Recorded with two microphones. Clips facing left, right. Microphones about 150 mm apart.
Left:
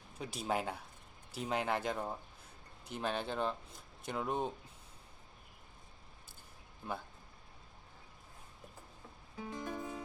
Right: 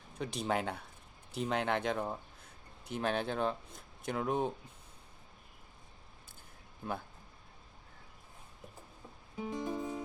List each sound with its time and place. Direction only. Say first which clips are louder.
0.2 s speech: right 2 dB; 5° left (ahead or behind)
6.8 s speech: right 3 dB; centre (ahead or behind)
9.4 s music: right 5 dB; 20° right (ahead or behind)